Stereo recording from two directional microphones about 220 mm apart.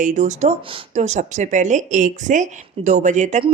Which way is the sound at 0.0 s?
35° right (ahead or behind).